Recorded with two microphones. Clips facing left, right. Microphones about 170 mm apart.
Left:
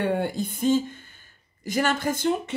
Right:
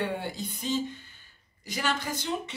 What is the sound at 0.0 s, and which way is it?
Speech, 50° left (ahead or behind).